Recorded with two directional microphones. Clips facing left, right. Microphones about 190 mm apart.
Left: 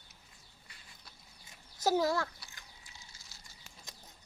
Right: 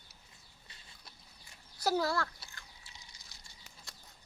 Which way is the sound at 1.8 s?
20° left (ahead or behind).